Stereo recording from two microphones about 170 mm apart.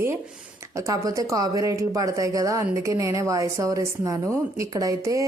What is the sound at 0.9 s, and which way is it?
A woman's voice, 20° right (ahead or behind).